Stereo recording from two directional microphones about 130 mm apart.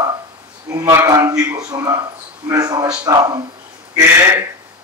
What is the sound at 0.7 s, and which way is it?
A man's voice, 25° right (ahead or behind).